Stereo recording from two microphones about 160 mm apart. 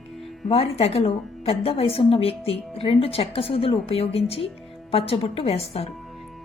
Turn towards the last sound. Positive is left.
turn(degrees=40)  # may be behind; listen again after turning